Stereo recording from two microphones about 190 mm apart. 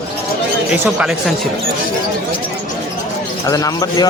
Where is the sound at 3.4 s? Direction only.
20° left (ahead or behind).